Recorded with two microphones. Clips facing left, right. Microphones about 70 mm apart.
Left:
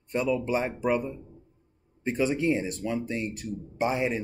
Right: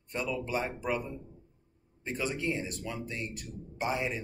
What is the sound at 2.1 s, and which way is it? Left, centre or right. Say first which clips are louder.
Speech: left 7 dB; left.